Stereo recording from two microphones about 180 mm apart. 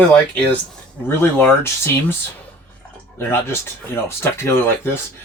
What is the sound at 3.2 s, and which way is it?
Speech, 10° left (ahead or behind).